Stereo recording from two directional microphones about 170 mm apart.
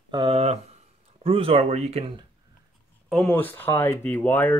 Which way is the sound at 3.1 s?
5° left (ahead or behind).